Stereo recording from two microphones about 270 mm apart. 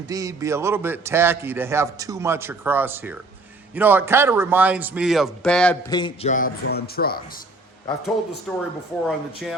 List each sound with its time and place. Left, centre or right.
0.1 s a man's voice: centre
5.9 s a man's voice: centre
6.3 s speech: left
8.5 s a man's voice: centre